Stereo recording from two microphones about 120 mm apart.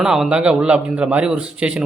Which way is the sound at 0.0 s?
5° right (ahead or behind).